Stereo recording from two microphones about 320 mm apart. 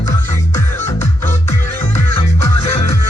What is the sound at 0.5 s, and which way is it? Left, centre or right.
Music, centre.